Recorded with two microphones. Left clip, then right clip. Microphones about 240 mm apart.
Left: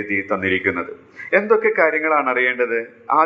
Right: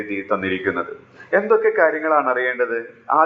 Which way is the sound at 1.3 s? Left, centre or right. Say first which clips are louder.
Even; left.